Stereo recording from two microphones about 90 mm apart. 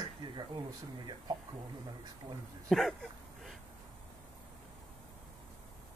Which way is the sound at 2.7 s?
5° left (ahead or behind).